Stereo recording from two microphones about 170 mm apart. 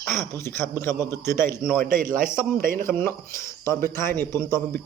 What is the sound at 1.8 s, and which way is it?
A man's voice, 55° right (ahead or behind).